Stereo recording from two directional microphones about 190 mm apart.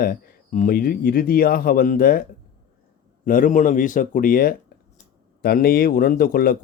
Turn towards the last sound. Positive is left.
turn(degrees=50)  # may be behind; listen again after turning